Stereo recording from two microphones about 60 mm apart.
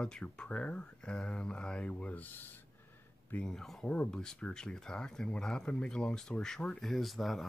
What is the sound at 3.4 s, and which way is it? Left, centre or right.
Speech, centre.